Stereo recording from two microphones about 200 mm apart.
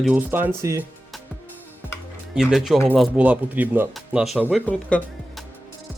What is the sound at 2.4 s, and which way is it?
Speech, centre (ahead or behind).